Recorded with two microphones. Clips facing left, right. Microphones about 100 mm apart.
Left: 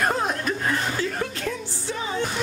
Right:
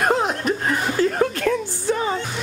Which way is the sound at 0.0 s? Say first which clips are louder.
Right 4 dB; 20° right (ahead or behind).